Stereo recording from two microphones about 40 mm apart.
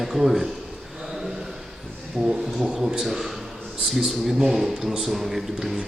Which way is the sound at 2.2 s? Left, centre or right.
Centre.